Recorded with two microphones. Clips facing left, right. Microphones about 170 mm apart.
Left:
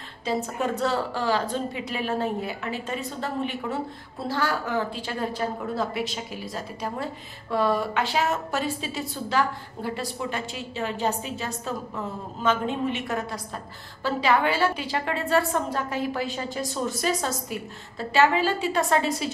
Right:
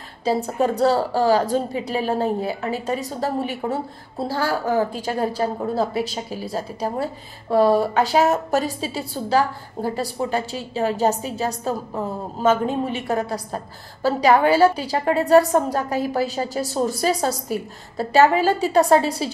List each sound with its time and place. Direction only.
0.2 s a woman's voice: 35° right (ahead or behind)